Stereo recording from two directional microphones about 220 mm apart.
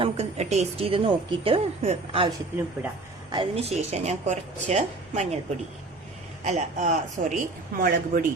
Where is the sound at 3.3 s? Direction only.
25° right (ahead or behind).